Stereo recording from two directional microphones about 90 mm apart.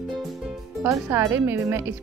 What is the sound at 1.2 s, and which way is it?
Speech, 30° right (ahead or behind).